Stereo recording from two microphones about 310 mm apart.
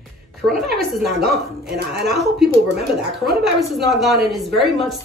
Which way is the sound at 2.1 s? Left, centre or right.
Centre.